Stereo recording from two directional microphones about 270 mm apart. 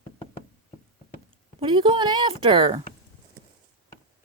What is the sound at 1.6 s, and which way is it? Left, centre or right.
A woman's voice, centre.